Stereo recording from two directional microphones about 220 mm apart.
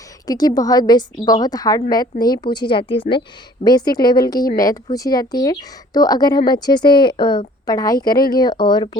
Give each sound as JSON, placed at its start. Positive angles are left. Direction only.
{"t": 0.3, "sound": "a woman's voice", "side_deg": 15}